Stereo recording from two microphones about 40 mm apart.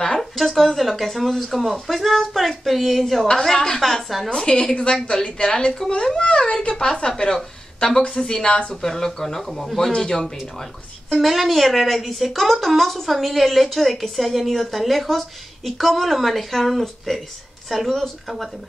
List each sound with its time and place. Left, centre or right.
0.0 s a sound: centre
0.4 s speech: centre
3.3 s speech: centre
3.8 s speech: centre
4.3 s a child's voice: left
8.8 s speech: centre
9.9 s speech: centre
11.1 s speech: centre